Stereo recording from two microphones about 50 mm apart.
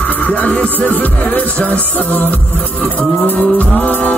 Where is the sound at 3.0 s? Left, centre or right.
Left.